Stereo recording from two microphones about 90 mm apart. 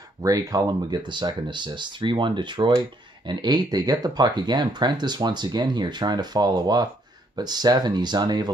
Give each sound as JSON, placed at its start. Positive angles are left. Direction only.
{"t": 0.2, "sound": "speech", "side_deg": -40}